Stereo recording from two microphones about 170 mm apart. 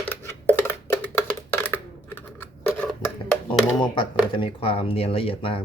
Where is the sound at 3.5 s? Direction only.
30° left (ahead or behind).